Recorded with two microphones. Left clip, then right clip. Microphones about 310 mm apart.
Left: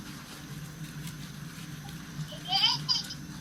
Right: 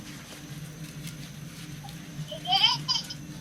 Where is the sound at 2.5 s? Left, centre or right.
Centre.